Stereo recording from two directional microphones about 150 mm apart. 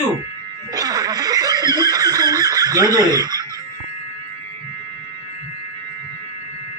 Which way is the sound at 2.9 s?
25° right (ahead or behind).